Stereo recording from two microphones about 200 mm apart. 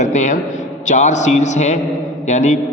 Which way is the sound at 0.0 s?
35° left (ahead or behind).